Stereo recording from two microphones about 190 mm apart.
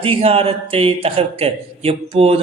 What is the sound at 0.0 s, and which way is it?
Speech, 30° right (ahead or behind).